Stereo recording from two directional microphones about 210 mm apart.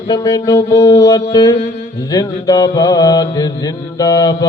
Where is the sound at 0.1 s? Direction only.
20° left (ahead or behind).